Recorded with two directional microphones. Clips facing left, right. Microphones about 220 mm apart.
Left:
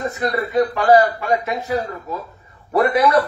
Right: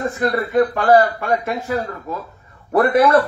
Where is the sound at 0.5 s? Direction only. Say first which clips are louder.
Even; 50° right (ahead or behind).